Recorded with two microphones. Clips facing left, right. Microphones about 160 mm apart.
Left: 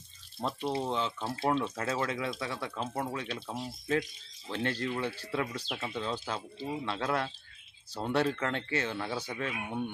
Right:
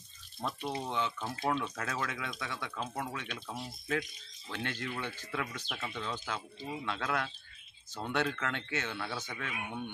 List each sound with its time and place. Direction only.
0.4 s speech: 30° left (ahead or behind)
9.0 s speech: 15° left (ahead or behind)
9.3 s speech: 30° left (ahead or behind)